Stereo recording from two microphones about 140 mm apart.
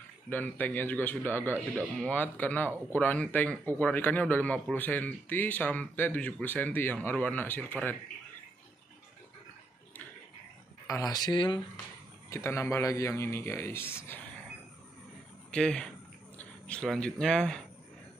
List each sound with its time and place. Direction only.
0.3 s speech: 10° left (ahead or behind)
10.9 s a man's voice: 25° left (ahead or behind)
12.3 s a man's voice: 20° left (ahead or behind)
15.5 s speech: 5° left (ahead or behind)